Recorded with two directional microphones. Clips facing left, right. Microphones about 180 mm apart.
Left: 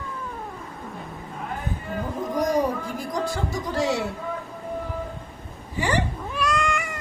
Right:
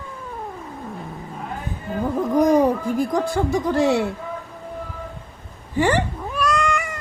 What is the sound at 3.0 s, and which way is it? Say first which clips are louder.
Speech: right 7 dB; 55° right (ahead or behind).